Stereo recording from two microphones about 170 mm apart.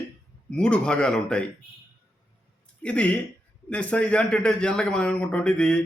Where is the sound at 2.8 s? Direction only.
5° left (ahead or behind).